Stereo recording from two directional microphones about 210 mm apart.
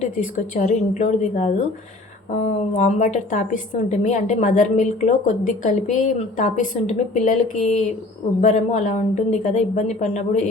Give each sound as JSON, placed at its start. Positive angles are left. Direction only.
{"t": 0.0, "sound": "a woman's voice", "side_deg": 35}